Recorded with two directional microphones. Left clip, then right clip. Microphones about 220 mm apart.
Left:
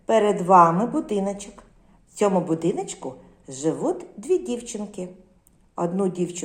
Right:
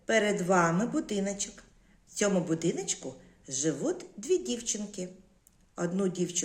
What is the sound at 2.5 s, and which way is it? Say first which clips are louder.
Speech: left 6 dB; 20° right (ahead or behind).